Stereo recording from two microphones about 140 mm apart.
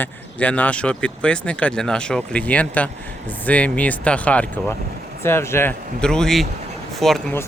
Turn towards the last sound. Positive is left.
turn(degrees=0)  # may be behind; listen again after turning